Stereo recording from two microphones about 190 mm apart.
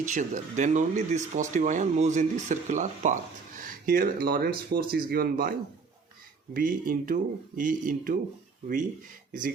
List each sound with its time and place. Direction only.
0.0 s speech: 40° right (ahead or behind)